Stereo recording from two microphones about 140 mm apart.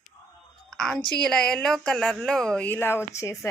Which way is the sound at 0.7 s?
5° left (ahead or behind).